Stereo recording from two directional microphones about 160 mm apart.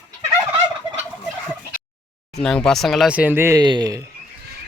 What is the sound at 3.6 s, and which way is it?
Speech, 25° right (ahead or behind).